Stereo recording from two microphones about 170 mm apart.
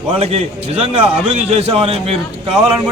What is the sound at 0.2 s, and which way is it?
A man's voice, 35° right (ahead or behind).